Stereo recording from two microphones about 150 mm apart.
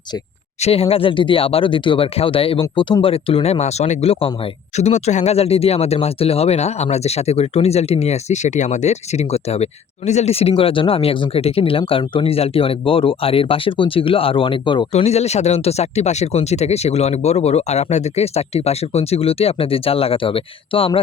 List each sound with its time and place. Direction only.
0.6 s speech: 40° left (ahead or behind)